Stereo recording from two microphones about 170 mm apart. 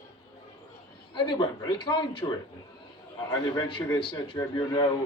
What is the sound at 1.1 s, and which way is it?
A man's voice, 30° left (ahead or behind).